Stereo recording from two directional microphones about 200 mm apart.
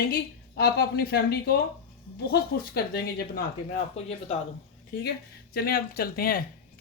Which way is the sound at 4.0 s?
30° left (ahead or behind).